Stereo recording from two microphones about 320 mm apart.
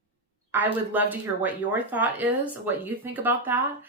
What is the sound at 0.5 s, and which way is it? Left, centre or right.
Speech, centre.